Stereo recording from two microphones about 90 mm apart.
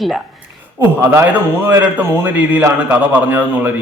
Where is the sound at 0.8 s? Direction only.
20° right (ahead or behind).